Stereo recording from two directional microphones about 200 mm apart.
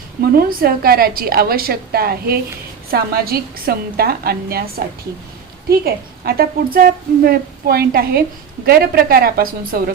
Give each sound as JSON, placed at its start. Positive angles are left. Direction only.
{"t": 0.3, "sound": "a woman's voice", "side_deg": -45}